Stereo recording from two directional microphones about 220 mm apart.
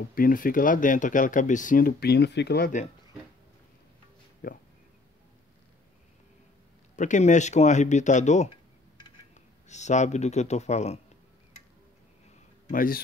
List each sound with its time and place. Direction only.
0.1 s speech: 40° left (ahead or behind)
4.4 s speech: 40° left (ahead or behind)
7.0 s speech: 35° left (ahead or behind)
12.6 s speech: 40° left (ahead or behind)